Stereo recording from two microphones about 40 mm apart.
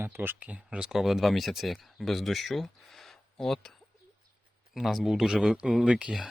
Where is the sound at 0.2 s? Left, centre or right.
Right.